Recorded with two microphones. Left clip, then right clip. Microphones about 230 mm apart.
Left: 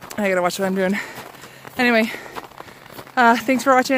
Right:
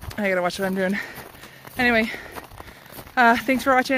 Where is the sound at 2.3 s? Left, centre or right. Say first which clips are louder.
Left 4 dB; right.